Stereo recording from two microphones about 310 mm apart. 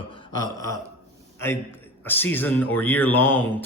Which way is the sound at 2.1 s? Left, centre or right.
Centre.